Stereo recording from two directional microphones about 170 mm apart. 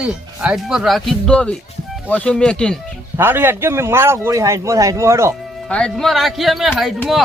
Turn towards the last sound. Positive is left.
turn(degrees=0)  # may be behind; listen again after turning